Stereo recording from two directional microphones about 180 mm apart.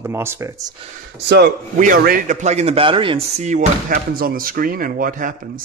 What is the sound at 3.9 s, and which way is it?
Speech, 55° right (ahead or behind).